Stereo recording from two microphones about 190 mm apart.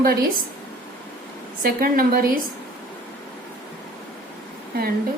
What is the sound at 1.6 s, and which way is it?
Speech, 50° right (ahead or behind).